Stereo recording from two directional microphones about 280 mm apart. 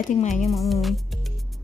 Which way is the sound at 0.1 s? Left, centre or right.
Left.